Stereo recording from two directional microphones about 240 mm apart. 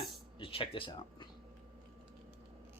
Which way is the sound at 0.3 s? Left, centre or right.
Left.